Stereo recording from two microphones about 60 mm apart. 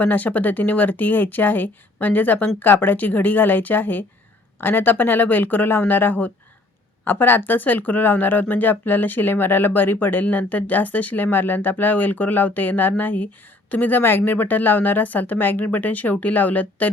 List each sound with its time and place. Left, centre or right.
0.0 s a woman's voice: left